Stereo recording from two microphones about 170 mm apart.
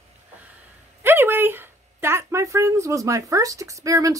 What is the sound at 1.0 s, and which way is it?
Speech, 10° right (ahead or behind).